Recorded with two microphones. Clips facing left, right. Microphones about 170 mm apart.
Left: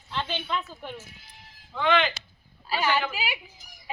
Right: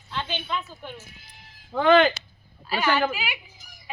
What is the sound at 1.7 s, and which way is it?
Speech, 45° right (ahead or behind).